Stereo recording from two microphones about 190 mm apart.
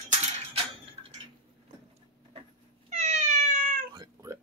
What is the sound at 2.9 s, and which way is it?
Cat, 40° right (ahead or behind).